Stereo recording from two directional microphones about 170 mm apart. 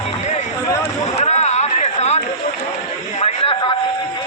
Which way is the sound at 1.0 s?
40° left (ahead or behind).